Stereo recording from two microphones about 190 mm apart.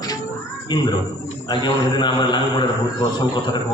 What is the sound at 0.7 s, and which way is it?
A man's voice, 25° left (ahead or behind).